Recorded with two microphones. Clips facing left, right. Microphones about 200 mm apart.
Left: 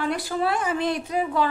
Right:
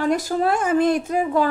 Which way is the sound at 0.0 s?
45° right (ahead or behind).